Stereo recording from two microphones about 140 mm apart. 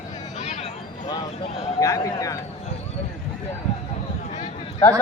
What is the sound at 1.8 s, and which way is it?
Speech, 25° left (ahead or behind).